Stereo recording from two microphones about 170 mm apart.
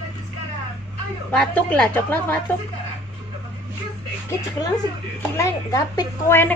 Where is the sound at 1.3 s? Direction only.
10° left (ahead or behind).